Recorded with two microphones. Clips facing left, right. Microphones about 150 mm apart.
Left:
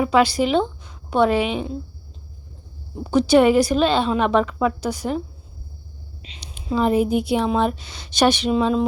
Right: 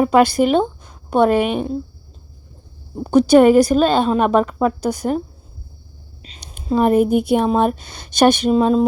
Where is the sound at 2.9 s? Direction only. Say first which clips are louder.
Right 4 dB; 45° right (ahead or behind).